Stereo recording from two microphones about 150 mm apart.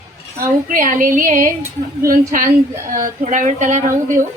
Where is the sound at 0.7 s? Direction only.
65° right (ahead or behind).